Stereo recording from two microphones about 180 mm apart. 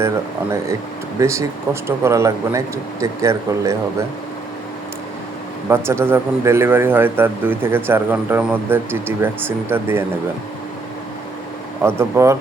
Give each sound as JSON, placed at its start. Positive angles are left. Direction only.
{"t": 1.2, "sound": "speech", "side_deg": -15}
{"t": 5.6, "sound": "speech", "side_deg": -15}
{"t": 11.8, "sound": "speech", "side_deg": -15}